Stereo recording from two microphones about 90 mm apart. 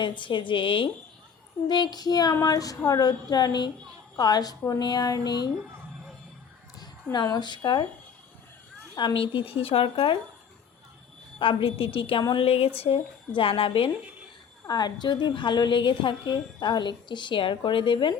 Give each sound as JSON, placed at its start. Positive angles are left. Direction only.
{"t": 0.0, "sound": "speech", "side_deg": 65}
{"t": 1.6, "sound": "a sound", "side_deg": 55}
{"t": 6.7, "sound": "a woman's voice", "side_deg": 50}
{"t": 9.0, "sound": "speech", "side_deg": 65}
{"t": 11.3, "sound": "a woman's voice", "side_deg": 85}
{"t": 14.7, "sound": "a woman's voice", "side_deg": 50}